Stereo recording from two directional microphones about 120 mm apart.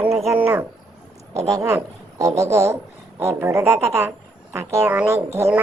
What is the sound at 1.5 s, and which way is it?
Speech, 25° right (ahead or behind).